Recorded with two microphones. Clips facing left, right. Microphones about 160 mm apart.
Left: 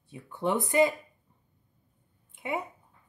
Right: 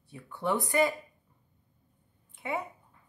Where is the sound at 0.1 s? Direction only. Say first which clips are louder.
Left 2 dB; 20° left (ahead or behind).